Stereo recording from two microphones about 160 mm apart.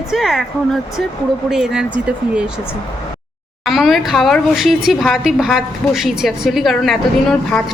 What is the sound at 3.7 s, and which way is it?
A woman's voice, centre (ahead or behind).